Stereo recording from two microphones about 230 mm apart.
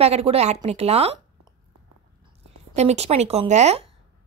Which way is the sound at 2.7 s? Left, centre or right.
Right.